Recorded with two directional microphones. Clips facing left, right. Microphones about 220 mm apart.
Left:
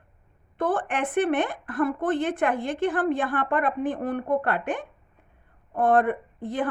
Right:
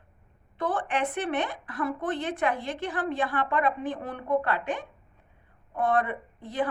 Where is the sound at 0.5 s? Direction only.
50° left (ahead or behind).